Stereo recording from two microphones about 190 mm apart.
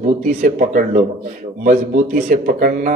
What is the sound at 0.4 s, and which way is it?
Speech, 45° right (ahead or behind).